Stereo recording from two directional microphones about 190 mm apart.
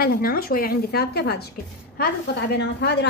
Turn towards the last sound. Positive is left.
turn(degrees=65)  # may be behind; listen again after turning